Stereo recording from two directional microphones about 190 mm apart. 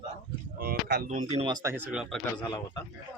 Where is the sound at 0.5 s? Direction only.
50° right (ahead or behind).